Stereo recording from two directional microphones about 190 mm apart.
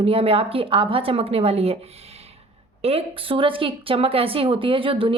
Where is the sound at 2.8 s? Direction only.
30° right (ahead or behind).